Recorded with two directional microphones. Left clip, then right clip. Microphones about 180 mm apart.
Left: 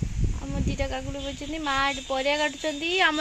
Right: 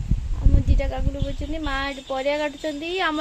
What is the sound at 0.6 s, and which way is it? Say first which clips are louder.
Speech: left 1 dB; 10° left (ahead or behind).